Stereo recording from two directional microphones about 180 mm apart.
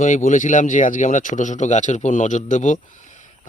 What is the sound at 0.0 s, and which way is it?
Speech, 45° left (ahead or behind).